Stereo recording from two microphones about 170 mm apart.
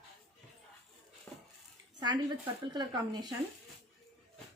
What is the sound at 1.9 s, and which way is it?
Speech, 25° right (ahead or behind).